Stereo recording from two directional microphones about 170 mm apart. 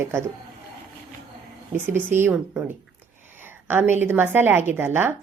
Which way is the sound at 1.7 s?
15° right (ahead or behind).